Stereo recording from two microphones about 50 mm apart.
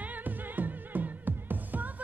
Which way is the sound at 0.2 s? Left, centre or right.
Right.